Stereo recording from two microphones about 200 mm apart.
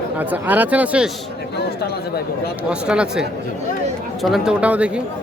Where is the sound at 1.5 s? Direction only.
55° left (ahead or behind).